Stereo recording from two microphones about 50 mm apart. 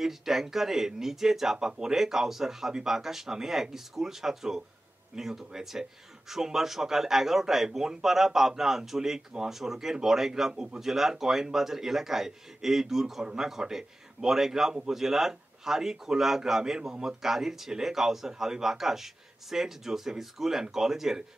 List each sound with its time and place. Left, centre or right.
0.0 s speech: centre
10.5 s a man's voice: centre
10.8 s speech: centre